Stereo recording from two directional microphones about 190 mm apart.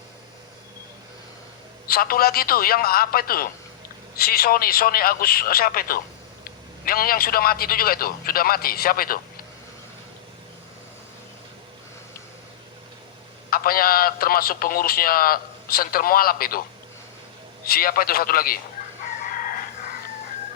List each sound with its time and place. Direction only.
1.9 s a man's voice: 50° left (ahead or behind)
13.5 s a man's voice: 50° left (ahead or behind)
17.7 s a man's voice: 50° left (ahead or behind)
19.3 s chicken: 45° left (ahead or behind)